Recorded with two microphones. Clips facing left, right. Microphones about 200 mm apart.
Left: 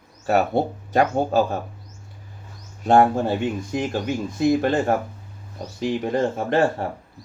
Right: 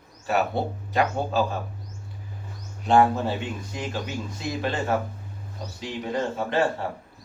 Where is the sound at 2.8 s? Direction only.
45° left (ahead or behind).